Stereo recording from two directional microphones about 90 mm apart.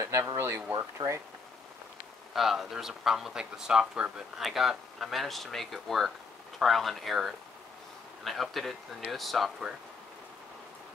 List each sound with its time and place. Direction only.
0.4 s speech: 30° right (ahead or behind)
2.3 s speech: 5° right (ahead or behind)